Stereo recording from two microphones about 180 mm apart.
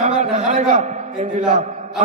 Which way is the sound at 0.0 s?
40° right (ahead or behind).